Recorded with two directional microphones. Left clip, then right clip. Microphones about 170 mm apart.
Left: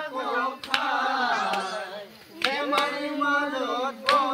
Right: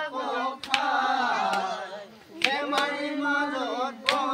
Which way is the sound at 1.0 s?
15° right (ahead or behind).